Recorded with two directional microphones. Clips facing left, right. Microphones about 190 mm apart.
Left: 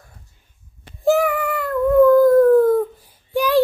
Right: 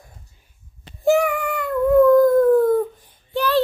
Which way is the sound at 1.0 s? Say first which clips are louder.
Left 1 dB; centre (ahead or behind).